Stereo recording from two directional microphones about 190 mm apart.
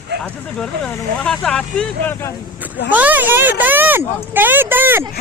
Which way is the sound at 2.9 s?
10° right (ahead or behind).